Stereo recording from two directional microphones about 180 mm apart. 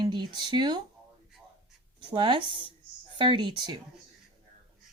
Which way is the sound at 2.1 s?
25° right (ahead or behind).